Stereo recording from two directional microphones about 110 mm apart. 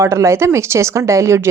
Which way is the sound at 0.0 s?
25° right (ahead or behind).